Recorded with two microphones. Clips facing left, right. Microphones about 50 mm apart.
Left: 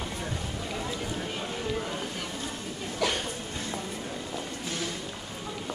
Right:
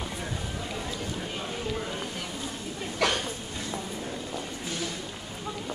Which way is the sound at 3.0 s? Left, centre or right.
Right.